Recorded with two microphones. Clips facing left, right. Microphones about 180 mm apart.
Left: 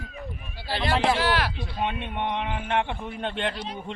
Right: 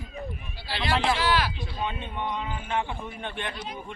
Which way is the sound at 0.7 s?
50° left (ahead or behind).